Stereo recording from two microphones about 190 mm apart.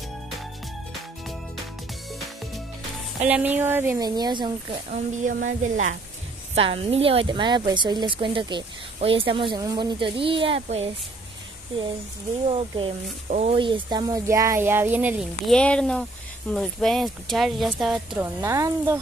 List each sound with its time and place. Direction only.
3.3 s speech: 10° right (ahead or behind)
4.1 s a woman's voice: 25° right (ahead or behind)
5.2 s speech: 40° right (ahead or behind)
6.5 s a woman's voice: 30° right (ahead or behind)
12.4 s a woman's voice: 30° right (ahead or behind); by 18.2 s centre (ahead or behind)
18.2 s speech: 15° right (ahead or behind)